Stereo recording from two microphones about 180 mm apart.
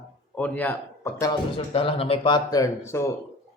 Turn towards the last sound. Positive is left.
turn(degrees=15)  # may be behind; listen again after turning